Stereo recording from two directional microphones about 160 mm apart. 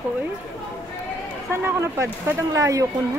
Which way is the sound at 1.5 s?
15° right (ahead or behind).